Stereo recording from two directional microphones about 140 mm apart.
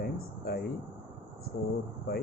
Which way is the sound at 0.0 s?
90° left.